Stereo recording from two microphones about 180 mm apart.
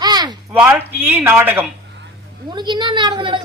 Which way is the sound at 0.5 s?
10° right (ahead or behind).